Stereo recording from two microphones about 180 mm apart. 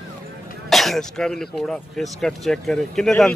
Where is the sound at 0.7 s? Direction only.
Centre (ahead or behind).